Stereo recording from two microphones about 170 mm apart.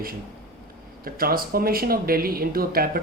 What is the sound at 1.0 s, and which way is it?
Speech, 60° right (ahead or behind).